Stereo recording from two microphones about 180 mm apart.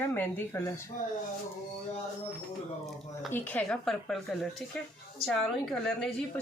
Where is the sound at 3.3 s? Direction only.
10° left (ahead or behind).